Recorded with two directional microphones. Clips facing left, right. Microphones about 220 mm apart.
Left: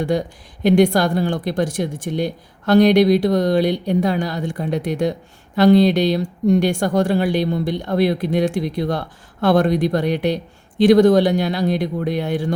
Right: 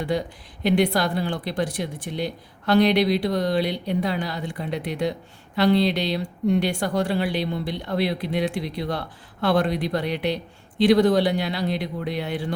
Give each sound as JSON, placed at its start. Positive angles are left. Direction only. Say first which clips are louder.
{"t": 0.0, "sound": "speech", "louder": "left 5 dB", "side_deg": 45}